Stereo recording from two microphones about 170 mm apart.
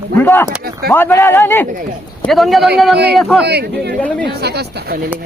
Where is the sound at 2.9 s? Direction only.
75° right (ahead or behind).